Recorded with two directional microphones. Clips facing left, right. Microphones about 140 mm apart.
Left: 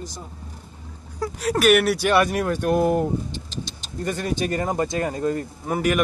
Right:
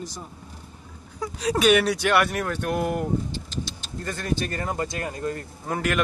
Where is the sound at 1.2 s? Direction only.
5° left (ahead or behind); by 5.5 s 25° left (ahead or behind).